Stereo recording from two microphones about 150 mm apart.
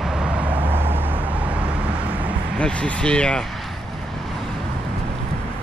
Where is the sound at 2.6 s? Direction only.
5° left (ahead or behind).